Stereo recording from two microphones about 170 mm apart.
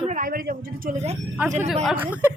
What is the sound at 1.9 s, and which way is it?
Speech, 10° right (ahead or behind).